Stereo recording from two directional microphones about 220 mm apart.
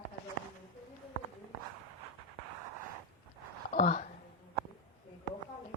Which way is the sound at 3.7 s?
35° left (ahead or behind).